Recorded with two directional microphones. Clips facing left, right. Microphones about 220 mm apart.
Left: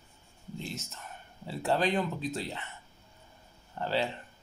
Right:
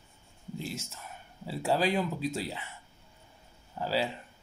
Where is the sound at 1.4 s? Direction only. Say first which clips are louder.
Right 1 dB; 10° right (ahead or behind).